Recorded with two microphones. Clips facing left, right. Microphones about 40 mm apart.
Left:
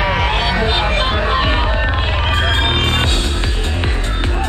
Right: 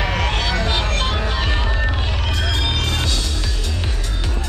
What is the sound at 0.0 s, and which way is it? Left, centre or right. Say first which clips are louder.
Music: left 5 dB; centre.